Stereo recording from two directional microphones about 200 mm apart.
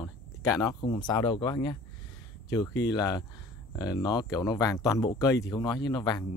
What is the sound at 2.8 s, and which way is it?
Speech, 20° left (ahead or behind).